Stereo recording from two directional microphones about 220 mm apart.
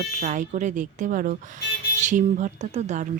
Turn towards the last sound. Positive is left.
turn(degrees=-30)  # may be behind; listen again after turning